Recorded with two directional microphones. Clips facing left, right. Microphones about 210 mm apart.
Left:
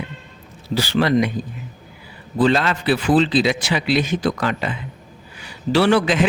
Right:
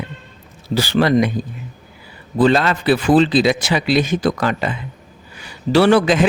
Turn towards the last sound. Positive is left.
turn(degrees=-45)  # may be behind; listen again after turning